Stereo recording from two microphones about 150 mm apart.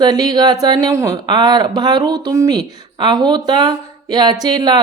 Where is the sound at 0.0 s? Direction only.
25° right (ahead or behind).